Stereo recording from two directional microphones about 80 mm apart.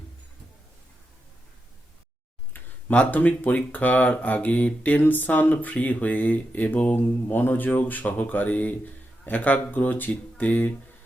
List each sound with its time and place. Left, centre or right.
2.5 s speech: centre